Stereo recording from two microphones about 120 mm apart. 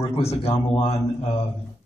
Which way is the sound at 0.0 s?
60° left (ahead or behind).